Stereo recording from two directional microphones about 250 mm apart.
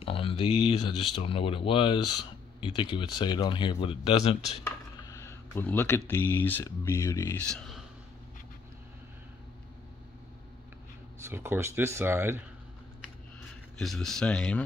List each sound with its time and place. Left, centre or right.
0.0 s speech: left
4.6 s speech: centre
11.2 s speech: centre
13.7 s speech: centre